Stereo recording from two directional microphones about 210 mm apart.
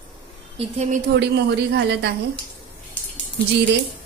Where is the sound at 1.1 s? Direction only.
55° right (ahead or behind).